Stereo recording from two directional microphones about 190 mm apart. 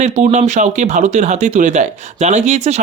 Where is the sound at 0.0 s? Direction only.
40° right (ahead or behind).